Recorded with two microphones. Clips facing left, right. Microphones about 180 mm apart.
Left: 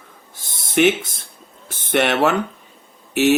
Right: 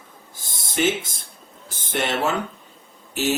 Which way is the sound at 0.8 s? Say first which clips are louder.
Left 6 dB; 70° left (ahead or behind).